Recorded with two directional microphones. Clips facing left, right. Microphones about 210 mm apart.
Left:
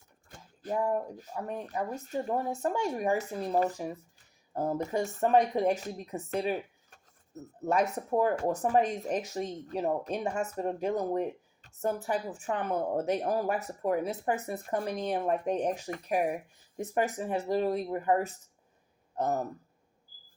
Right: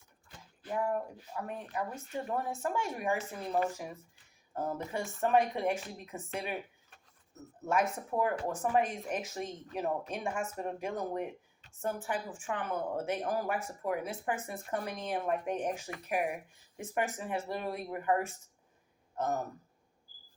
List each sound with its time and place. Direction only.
0.3 s speech: 45° left (ahead or behind)